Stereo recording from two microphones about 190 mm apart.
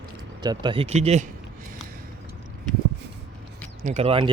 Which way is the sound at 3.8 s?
30° right (ahead or behind).